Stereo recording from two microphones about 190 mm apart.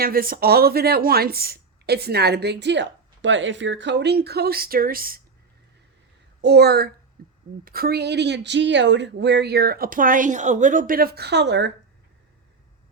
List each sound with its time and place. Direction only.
0.0 s a woman's voice: 50° right (ahead or behind)
6.4 s a woman's voice: 60° right (ahead or behind)
7.2 s a sound: 50° right (ahead or behind)
7.6 s a woman's voice: 50° right (ahead or behind)